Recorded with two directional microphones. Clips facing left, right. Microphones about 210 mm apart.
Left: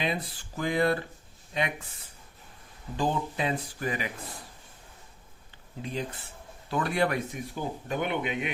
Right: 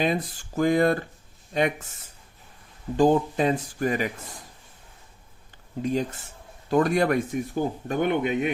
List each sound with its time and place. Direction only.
0.0 s speech: 45° right (ahead or behind)
3.0 s speech: 45° right (ahead or behind)
5.8 s speech: 45° right (ahead or behind)